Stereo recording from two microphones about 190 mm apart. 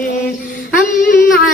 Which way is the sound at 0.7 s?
45° left (ahead or behind).